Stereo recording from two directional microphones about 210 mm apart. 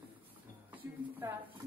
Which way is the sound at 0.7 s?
10° right (ahead or behind).